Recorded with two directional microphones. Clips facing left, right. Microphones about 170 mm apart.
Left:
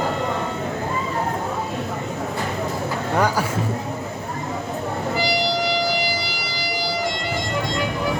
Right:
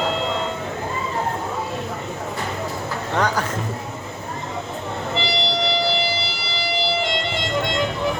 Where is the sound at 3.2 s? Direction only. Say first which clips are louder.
Left 1 dB; 10° left (ahead or behind).